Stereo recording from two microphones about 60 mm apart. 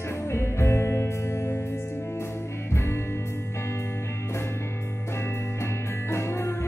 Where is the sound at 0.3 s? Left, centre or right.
Left.